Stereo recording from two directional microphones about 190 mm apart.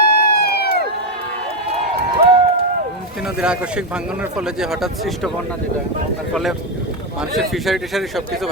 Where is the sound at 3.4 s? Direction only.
5° right (ahead or behind).